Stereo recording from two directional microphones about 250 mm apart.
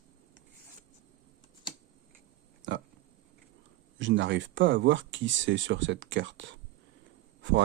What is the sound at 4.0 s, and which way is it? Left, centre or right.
Speech, right.